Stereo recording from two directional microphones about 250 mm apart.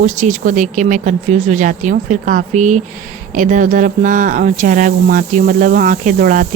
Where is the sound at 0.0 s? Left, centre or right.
Right.